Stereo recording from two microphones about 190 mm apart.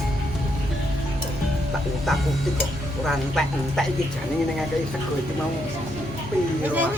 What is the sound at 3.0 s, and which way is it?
Speech, centre (ahead or behind).